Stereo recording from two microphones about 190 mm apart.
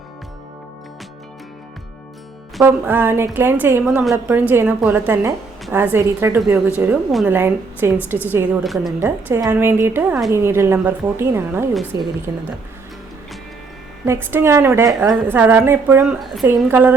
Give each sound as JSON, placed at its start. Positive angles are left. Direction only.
{"t": 2.6, "sound": "a woman's voice", "side_deg": -10}
{"t": 3.8, "sound": "a woman's voice", "side_deg": 0}
{"t": 8.6, "sound": "a woman's voice", "side_deg": 0}
{"t": 9.0, "sound": "a woman's voice", "side_deg": -10}
{"t": 14.0, "sound": "a woman's voice", "side_deg": -15}
{"t": 16.2, "sound": "a woman's voice", "side_deg": 0}